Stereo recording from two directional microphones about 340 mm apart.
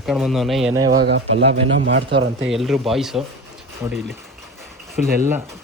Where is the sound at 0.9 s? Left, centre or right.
Right.